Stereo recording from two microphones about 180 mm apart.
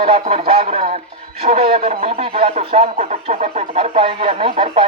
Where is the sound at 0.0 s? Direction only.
35° right (ahead or behind).